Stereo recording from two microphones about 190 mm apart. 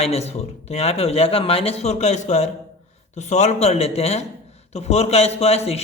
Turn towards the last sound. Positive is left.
turn(degrees=35)  # may be behind; listen again after turning